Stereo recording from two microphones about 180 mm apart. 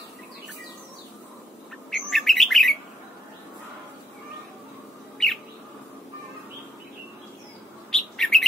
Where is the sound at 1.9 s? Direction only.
Centre (ahead or behind).